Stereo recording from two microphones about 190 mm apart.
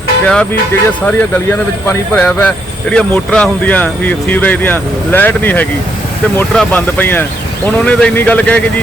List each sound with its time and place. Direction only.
0.3 s speech: 5° left (ahead or behind)